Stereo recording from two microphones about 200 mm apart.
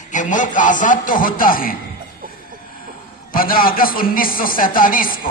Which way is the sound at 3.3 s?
45° left (ahead or behind).